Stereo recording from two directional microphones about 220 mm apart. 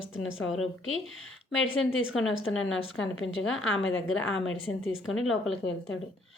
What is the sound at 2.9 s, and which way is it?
A woman's voice, 60° left (ahead or behind).